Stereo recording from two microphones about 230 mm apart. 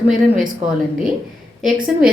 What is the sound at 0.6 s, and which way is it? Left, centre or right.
Speech, right.